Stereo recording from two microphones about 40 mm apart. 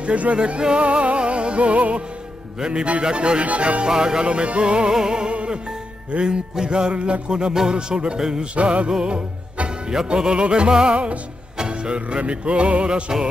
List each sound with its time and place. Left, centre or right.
0.0 s music: right
0.4 s music: right
3.8 s music: centre
4.2 s music: right
5.3 s music: right
8.5 s music: right